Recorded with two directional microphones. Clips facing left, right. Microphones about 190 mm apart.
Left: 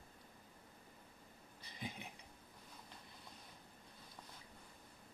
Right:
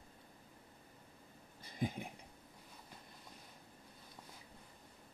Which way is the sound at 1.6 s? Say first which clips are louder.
Right 9 dB; 50° right (ahead or behind).